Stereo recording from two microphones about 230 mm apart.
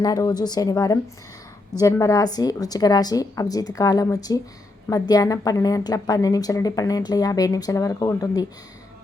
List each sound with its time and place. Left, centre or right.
0.0 s a woman's voice: centre